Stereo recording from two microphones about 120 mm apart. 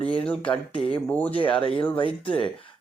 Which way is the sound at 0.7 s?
50° left (ahead or behind).